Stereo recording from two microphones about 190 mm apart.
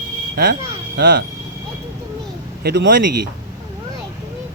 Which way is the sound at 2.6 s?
65° right (ahead or behind).